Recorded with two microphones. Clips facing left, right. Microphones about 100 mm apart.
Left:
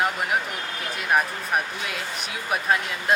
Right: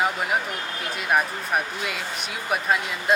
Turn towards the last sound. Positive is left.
turn(degrees=0)  # may be behind; listen again after turning